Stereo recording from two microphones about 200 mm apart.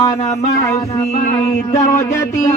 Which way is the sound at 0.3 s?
15° left (ahead or behind).